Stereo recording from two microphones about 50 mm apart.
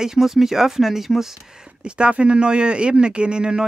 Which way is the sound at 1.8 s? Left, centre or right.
Centre.